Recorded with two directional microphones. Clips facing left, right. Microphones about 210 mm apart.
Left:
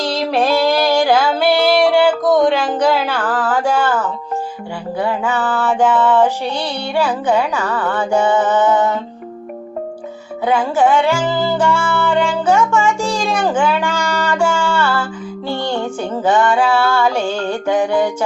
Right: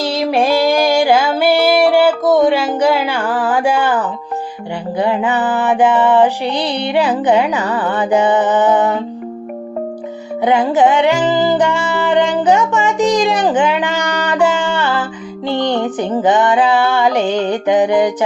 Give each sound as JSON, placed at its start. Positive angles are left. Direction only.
{"t": 0.0, "sound": "music", "side_deg": -10}
{"t": 4.9, "sound": "female singing", "side_deg": -20}
{"t": 10.4, "sound": "music", "side_deg": -20}
{"t": 15.4, "sound": "female singing", "side_deg": -20}